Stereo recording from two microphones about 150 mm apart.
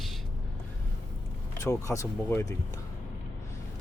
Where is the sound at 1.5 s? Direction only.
20° left (ahead or behind).